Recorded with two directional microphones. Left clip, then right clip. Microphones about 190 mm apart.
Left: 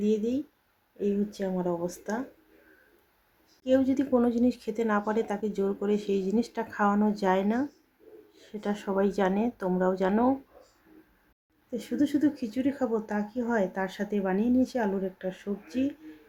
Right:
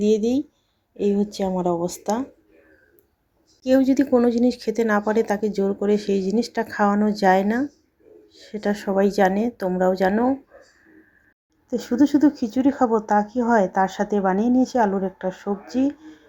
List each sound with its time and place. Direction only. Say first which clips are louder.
0.0 s speech: right 8 dB; 20° right (ahead or behind)
3.6 s speech: right 7 dB; 15° right (ahead or behind)
11.7 s speech: right 9 dB; 15° right (ahead or behind)